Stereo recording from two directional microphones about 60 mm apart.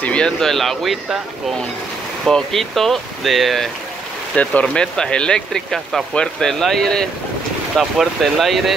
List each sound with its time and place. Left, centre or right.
0.0 s speech: centre
0.4 s speech: centre
2.2 s speech: centre
4.4 s speech: left; by 8.7 s centre